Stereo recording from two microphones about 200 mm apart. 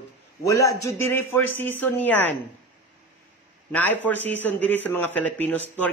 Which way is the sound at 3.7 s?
10° left (ahead or behind).